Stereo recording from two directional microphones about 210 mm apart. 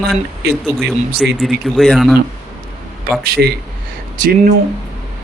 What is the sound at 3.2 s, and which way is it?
Speech, 45° right (ahead or behind).